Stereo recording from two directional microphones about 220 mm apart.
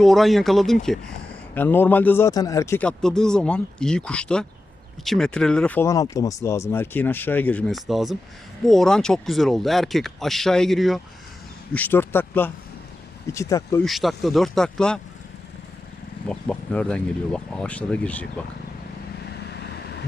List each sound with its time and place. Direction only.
0.0 s speech: centre (ahead or behind)
13.8 s speech: centre (ahead or behind)
16.2 s speech: 5° left (ahead or behind)
19.4 s vehicle: 50° left (ahead or behind)